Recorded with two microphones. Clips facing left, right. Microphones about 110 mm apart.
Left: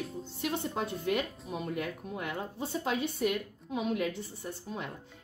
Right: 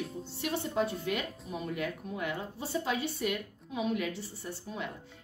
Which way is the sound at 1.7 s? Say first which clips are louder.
Even; 45° left (ahead or behind).